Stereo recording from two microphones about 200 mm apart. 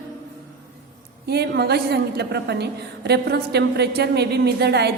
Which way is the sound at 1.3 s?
55° right (ahead or behind).